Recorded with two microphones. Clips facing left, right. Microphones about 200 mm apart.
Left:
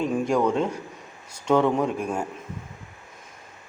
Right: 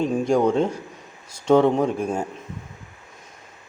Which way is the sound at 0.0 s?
25° right (ahead or behind).